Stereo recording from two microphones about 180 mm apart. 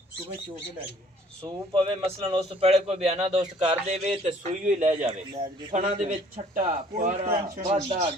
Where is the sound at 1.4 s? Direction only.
30° right (ahead or behind).